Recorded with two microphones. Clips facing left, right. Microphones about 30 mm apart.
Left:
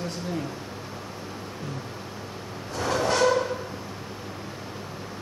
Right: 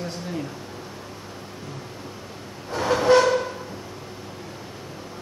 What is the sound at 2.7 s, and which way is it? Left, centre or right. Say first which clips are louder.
Train: right 7 dB; centre.